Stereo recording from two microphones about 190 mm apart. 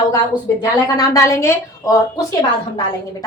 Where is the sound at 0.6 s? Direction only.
20° left (ahead or behind).